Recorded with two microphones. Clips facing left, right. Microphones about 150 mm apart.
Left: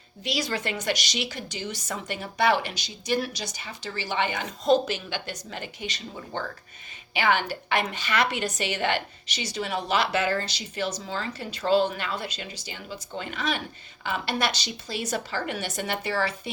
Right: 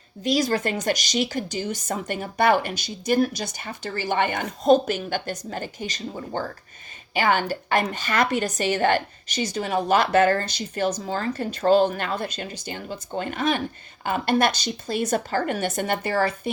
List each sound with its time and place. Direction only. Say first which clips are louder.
0.3 s a woman's voice: right 7 dB; 45° right (ahead or behind)